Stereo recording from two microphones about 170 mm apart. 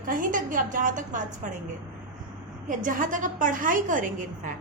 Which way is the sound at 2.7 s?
50° right (ahead or behind).